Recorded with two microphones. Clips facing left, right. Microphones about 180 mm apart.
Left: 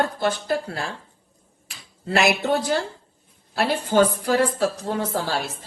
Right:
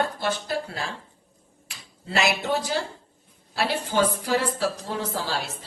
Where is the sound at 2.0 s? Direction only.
55° left (ahead or behind).